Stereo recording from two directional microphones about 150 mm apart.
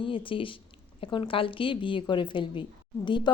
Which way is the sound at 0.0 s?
35° left (ahead or behind).